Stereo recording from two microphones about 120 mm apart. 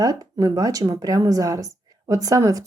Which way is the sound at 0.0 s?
30° right (ahead or behind).